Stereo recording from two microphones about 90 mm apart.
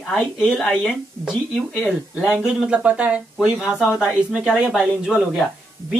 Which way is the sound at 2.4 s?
10° right (ahead or behind).